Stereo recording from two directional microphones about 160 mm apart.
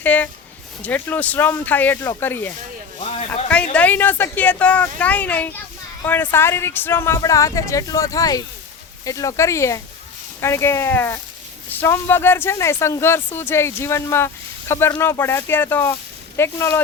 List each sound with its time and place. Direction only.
0.0 s speech: 10° left (ahead or behind)
3.0 s speech: 40° left (ahead or behind)
3.5 s speech: 10° left (ahead or behind)